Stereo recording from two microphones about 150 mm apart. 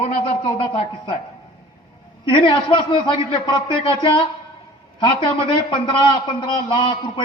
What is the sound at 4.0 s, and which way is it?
Speech, 35° left (ahead or behind).